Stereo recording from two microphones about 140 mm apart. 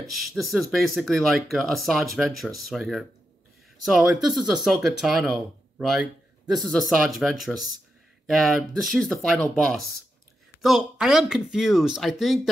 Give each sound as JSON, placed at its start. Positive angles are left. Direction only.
{"t": 0.1, "sound": "speech", "side_deg": 0}